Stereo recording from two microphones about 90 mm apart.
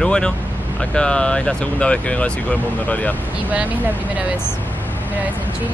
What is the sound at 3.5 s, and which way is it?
Speech, 15° right (ahead or behind).